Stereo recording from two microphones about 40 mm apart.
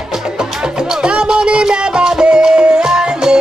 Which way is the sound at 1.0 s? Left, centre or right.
Right.